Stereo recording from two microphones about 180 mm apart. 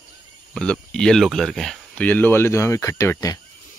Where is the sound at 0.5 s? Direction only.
5° left (ahead or behind).